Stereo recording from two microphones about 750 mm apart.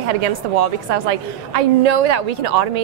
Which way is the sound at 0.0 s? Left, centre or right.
Right.